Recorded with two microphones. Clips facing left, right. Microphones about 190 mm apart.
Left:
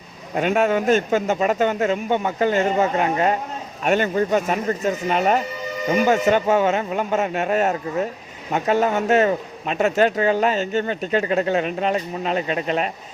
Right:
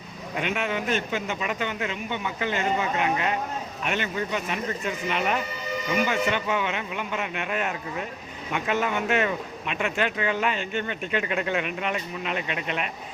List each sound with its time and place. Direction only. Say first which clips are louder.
0.3 s a man's voice: left 9 dB; 45° left (ahead or behind)